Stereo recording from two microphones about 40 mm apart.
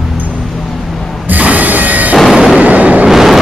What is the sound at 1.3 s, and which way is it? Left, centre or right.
Music, right.